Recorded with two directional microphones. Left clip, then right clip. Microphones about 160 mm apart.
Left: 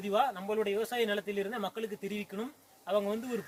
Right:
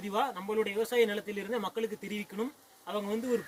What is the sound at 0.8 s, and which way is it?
Speech, 15° left (ahead or behind).